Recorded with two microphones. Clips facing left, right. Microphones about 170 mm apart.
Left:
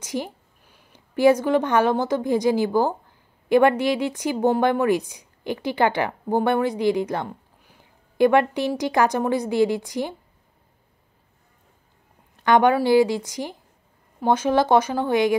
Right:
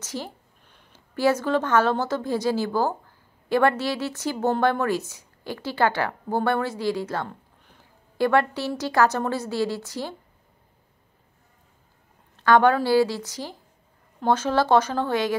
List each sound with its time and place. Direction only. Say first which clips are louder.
0.0 s a woman's voice: left 5 dB; 15° left (ahead or behind)
12.4 s a woman's voice: left 1 dB; 15° left (ahead or behind)